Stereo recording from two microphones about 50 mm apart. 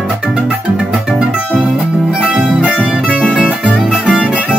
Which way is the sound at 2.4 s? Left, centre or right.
Right.